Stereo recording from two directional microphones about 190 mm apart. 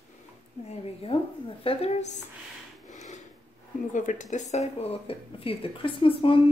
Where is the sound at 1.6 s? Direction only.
30° left (ahead or behind).